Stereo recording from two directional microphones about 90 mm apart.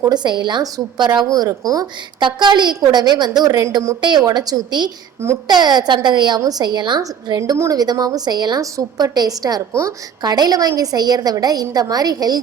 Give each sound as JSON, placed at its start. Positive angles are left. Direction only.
{"t": 0.0, "sound": "a woman's voice", "side_deg": -50}
{"t": 2.2, "sound": "a woman's voice", "side_deg": -55}
{"t": 7.0, "sound": "a woman's voice", "side_deg": -45}